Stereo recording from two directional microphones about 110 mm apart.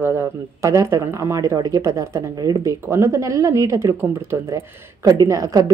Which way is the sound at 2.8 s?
25° right (ahead or behind).